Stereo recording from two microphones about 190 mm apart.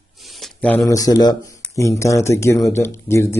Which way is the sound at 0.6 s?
5° left (ahead or behind).